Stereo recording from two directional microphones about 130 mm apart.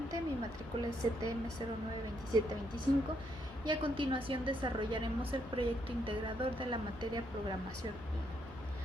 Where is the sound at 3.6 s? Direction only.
40° right (ahead or behind).